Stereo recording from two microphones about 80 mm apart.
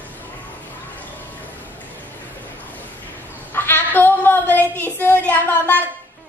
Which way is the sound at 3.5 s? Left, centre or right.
Left.